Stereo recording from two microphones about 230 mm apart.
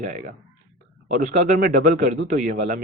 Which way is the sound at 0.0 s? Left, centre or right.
Right.